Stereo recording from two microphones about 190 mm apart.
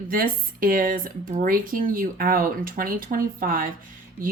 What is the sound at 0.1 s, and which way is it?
Speech, 50° right (ahead or behind).